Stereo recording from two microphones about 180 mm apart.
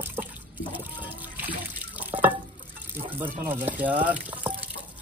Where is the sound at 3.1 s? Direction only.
10° right (ahead or behind).